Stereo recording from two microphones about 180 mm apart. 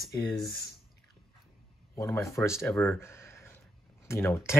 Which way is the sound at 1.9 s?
15° left (ahead or behind).